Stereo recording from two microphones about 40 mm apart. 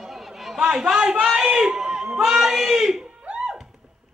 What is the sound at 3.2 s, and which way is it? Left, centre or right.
Music, right.